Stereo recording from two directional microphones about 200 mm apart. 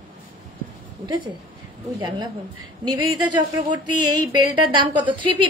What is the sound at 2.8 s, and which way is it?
Speech, 20° right (ahead or behind).